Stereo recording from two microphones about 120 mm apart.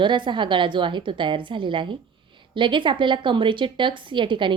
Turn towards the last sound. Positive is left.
turn(degrees=-45)  # may be behind; listen again after turning